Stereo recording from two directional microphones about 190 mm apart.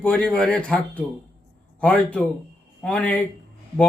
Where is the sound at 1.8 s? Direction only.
5° left (ahead or behind).